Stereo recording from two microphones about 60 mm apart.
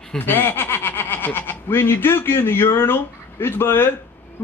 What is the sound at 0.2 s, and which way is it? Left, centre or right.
A man's voice, left.